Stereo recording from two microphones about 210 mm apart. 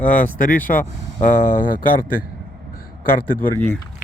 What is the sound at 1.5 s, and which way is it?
Speech, 40° left (ahead or behind).